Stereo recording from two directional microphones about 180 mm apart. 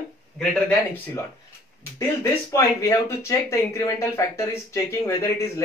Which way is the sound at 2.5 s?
15° left (ahead or behind).